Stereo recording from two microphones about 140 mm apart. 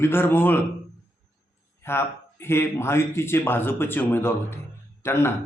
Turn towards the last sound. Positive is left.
turn(degrees=15)  # may be behind; listen again after turning